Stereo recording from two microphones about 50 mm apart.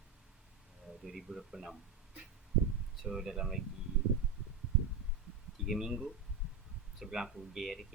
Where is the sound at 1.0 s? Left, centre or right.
Centre.